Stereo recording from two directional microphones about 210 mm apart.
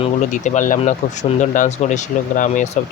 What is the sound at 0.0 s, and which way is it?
Speech, 35° left (ahead or behind).